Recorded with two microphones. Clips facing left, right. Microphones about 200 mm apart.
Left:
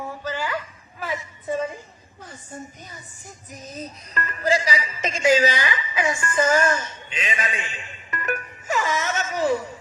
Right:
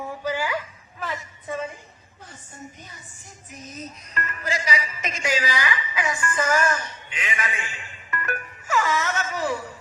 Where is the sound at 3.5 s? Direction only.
35° left (ahead or behind); by 9.1 s 20° left (ahead or behind).